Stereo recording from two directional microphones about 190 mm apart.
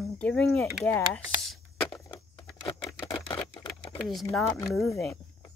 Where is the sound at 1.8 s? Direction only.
20° left (ahead or behind).